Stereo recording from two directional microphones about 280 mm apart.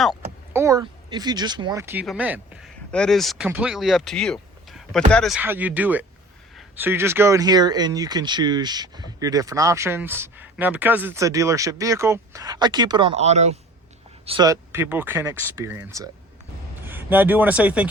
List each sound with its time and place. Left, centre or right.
0.0 s vehicle: centre
0.6 s speech: centre